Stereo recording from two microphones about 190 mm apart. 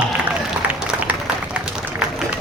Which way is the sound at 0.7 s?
5° right (ahead or behind).